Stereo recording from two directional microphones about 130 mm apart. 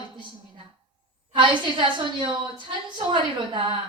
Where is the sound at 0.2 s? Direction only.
35° right (ahead or behind).